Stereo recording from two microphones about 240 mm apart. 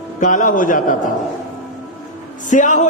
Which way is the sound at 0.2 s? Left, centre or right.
Left.